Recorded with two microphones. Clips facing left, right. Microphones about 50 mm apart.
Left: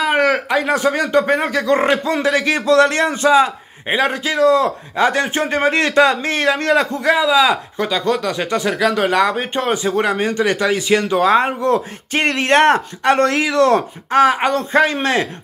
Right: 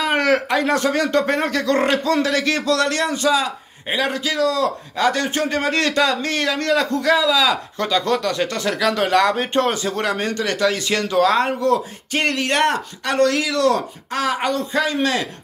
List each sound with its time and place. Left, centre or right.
0.0 s a man's voice: centre
7.8 s speech: centre; by 15.2 s left